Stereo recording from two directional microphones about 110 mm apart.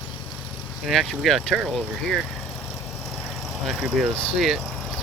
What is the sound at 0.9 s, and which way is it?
Speech, centre (ahead or behind).